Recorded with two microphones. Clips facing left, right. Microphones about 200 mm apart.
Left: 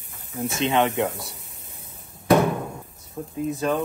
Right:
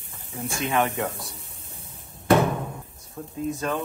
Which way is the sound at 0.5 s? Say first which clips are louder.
Left 3 dB; 25° left (ahead or behind).